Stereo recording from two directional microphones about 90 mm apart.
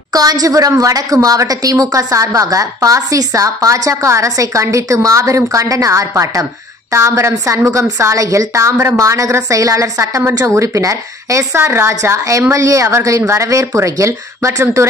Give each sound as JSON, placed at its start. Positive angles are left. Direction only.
{"t": 0.1, "sound": "a woman's voice", "side_deg": -45}